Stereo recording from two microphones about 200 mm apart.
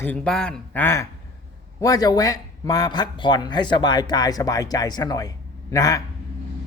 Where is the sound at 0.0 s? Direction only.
5° left (ahead or behind).